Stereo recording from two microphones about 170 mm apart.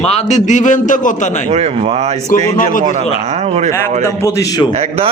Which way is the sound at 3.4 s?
40° right (ahead or behind).